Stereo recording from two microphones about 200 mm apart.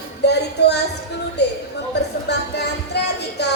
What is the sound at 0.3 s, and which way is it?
Speech, 55° left (ahead or behind).